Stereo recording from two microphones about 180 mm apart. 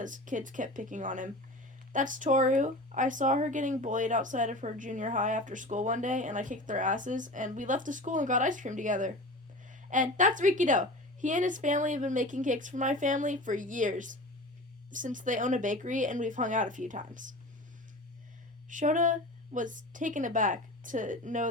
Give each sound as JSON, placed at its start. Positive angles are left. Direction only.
{"t": 0.0, "sound": "speech", "side_deg": -45}
{"t": 18.7, "sound": "speech", "side_deg": -45}